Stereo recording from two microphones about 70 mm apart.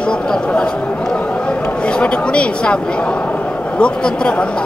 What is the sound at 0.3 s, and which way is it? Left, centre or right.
Speech, centre.